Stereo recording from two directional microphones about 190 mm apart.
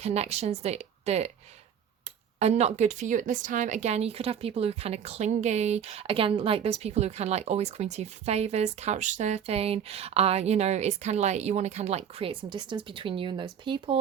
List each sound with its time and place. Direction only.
0.0 s a woman's voice: 35° right (ahead or behind)
2.4 s a woman's voice: 35° right (ahead or behind)